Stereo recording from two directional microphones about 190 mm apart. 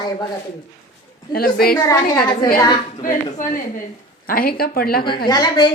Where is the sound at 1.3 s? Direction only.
50° left (ahead or behind).